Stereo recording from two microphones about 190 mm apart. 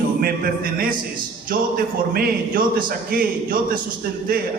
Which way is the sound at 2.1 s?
50° right (ahead or behind).